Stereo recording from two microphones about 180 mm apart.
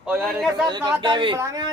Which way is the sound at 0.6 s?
25° right (ahead or behind).